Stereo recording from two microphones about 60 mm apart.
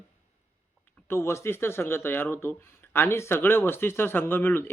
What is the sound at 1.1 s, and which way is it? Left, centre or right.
Speech, left.